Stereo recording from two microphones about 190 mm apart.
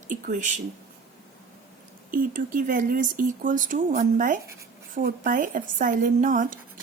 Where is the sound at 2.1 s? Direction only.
45° right (ahead or behind).